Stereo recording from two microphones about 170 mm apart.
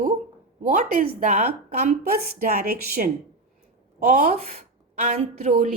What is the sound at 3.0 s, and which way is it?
Speech, 50° right (ahead or behind).